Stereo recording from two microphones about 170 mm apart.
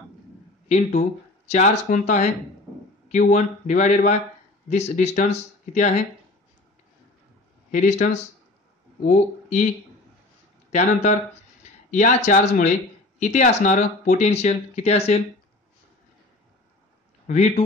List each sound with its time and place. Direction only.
0.7 s speech: 40° left (ahead or behind)
7.7 s speech: 45° left (ahead or behind)
10.7 s speech: 45° left (ahead or behind)
17.3 s speech: 40° left (ahead or behind)